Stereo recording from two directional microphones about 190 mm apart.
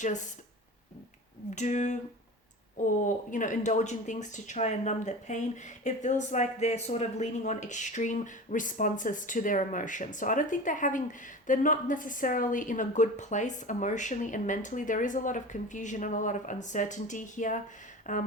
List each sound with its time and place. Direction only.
1.5 s speech: 40° left (ahead or behind)